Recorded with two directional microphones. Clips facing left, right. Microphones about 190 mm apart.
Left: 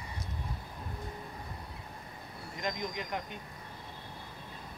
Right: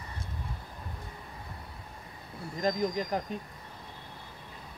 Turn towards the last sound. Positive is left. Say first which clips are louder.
# right 6 dB
turn(degrees=-35)  # may be behind; listen again after turning